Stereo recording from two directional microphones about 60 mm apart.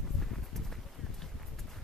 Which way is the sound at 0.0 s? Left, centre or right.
Centre.